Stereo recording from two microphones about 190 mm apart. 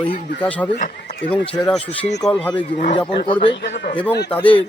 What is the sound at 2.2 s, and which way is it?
Speech, 5° left (ahead or behind).